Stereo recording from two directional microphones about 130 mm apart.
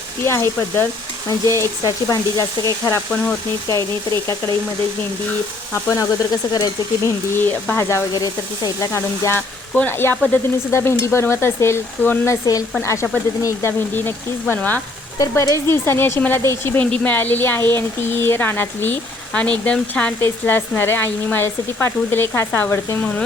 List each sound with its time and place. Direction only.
0.3 s speech: 20° left (ahead or behind)
5.7 s speech: 25° left (ahead or behind)
7.4 s speech: 15° left (ahead or behind)
15.2 s speech: 25° left (ahead or behind)